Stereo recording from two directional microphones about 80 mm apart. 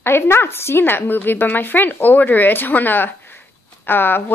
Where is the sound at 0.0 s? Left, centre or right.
Left.